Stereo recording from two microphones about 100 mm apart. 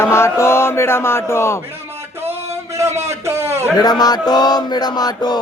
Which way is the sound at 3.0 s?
25° right (ahead or behind).